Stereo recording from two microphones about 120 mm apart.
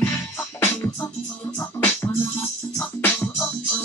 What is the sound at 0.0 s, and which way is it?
Music, 15° left (ahead or behind).